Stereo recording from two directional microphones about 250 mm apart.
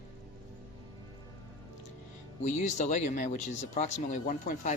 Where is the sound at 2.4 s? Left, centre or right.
Left.